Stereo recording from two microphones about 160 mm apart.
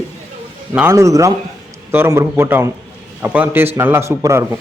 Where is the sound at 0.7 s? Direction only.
15° right (ahead or behind).